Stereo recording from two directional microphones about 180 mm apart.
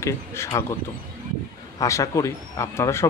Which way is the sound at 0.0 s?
15° left (ahead or behind).